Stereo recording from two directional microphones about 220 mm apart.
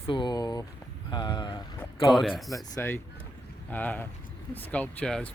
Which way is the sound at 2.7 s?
10° left (ahead or behind).